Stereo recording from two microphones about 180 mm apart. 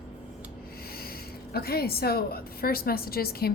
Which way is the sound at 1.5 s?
60° left (ahead or behind).